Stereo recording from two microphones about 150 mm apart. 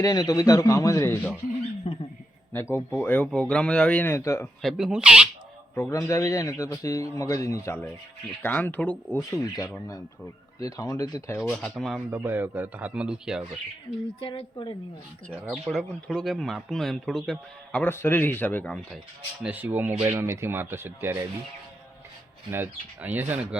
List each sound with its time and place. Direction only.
0.0 s a man's voice: 25° left (ahead or behind)
2.5 s speech: 15° left (ahead or behind)
4.6 s speech: 5° right (ahead or behind)
5.7 s a man's voice: 20° left (ahead or behind)
9.1 s a man's voice: 25° left (ahead or behind)
11.3 s speech: 5° left (ahead or behind)
11.9 s speech: 10° right (ahead or behind)
14.2 s speech: 35° left (ahead or behind)
15.4 s a man's voice: centre (ahead or behind)
19.4 s speech: 10° right (ahead or behind)
22.5 s speech: 15° right (ahead or behind)